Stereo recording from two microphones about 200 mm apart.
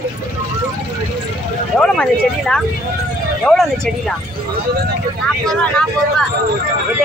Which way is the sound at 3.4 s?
5° left (ahead or behind).